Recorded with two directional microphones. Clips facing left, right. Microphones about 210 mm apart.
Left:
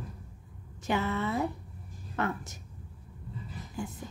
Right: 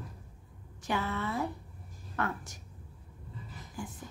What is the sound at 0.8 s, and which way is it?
Speech, 25° left (ahead or behind).